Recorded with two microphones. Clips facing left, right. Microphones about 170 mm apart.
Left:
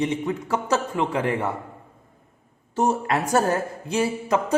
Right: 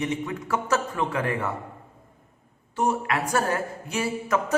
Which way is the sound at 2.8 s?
40° left (ahead or behind).